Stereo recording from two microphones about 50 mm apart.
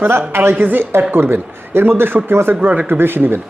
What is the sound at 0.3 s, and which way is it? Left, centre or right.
Speech, right.